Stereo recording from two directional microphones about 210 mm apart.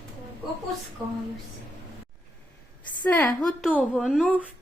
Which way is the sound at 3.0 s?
10° left (ahead or behind).